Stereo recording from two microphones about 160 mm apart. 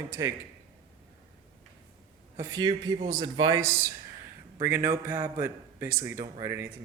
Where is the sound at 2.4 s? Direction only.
25° right (ahead or behind).